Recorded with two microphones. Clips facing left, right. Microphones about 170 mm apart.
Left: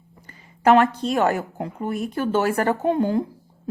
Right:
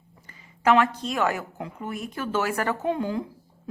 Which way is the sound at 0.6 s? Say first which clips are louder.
Left 4 dB; 40° left (ahead or behind).